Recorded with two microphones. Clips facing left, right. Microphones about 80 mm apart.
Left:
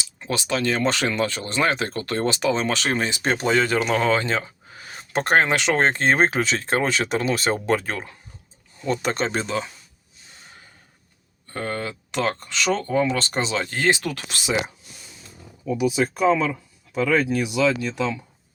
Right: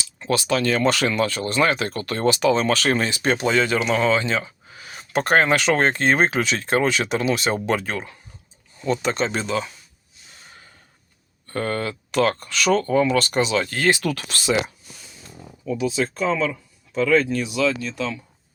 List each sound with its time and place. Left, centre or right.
0.0 s speech: centre; by 9.6 s left
11.5 s speech: centre